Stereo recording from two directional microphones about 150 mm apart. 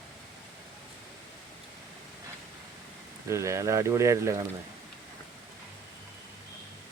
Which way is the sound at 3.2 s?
20° right (ahead or behind).